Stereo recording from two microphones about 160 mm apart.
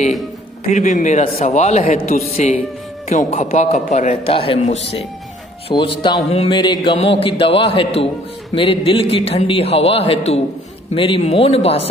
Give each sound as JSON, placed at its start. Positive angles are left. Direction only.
{"t": 0.7, "sound": "a man's voice", "side_deg": 50}